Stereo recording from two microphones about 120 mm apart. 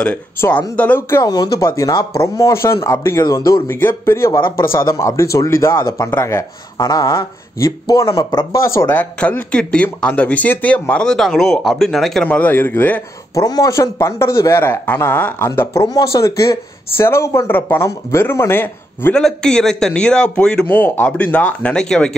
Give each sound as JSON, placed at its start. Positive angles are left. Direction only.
{"t": 0.0, "sound": "speech", "side_deg": 10}
{"t": 1.2, "sound": "speech", "side_deg": 30}
{"t": 8.9, "sound": "speech", "side_deg": 10}
{"t": 13.3, "sound": "speech", "side_deg": 30}
{"t": 19.1, "sound": "speech", "side_deg": 5}